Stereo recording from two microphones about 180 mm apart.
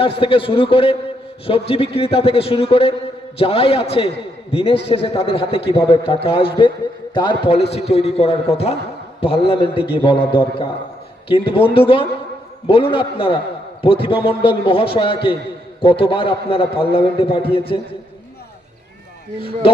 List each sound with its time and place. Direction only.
0.0 s a man's voice: 30° left (ahead or behind)